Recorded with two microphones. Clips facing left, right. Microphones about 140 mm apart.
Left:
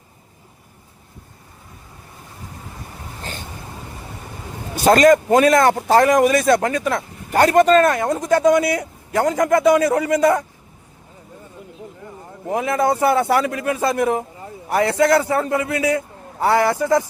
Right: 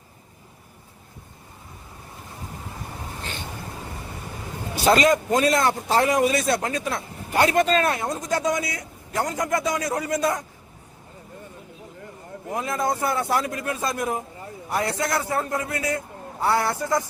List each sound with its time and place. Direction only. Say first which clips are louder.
4.7 s speech: left 6 dB; 45° left (ahead or behind); by 7.0 s 65° left (ahead or behind)
7.3 s speech: left 7 dB; 45° left (ahead or behind); by 9.4 s 85° left
9.4 s speech: left 12 dB; 60° left (ahead or behind)
12.5 s speech: left 7 dB; 70° left (ahead or behind)
14.7 s speech: left 9 dB; 75° left (ahead or behind)
16.4 s speech: left 6 dB; 90° left